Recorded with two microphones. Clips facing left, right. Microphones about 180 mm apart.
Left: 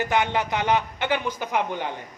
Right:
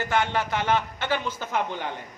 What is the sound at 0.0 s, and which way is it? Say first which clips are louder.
Speech: left 2 dB; 15° left (ahead or behind).